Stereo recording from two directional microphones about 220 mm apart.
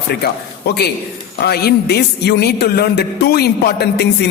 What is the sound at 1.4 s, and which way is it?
A man's voice, 45° left (ahead or behind).